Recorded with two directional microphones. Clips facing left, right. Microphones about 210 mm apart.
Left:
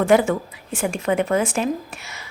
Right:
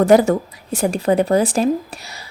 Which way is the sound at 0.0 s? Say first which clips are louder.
Right 4 dB; 40° right (ahead or behind).